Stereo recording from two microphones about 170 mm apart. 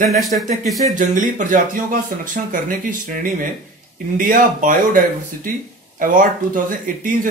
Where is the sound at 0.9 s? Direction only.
50° right (ahead or behind).